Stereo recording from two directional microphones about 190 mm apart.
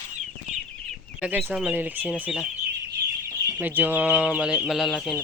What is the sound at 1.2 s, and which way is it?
Speech, 10° right (ahead or behind).